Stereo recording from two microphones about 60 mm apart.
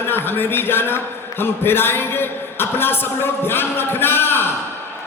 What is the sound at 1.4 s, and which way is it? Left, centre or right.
A man's voice, left.